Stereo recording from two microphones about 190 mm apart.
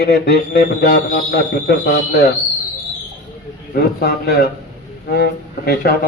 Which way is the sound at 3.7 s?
55° left (ahead or behind).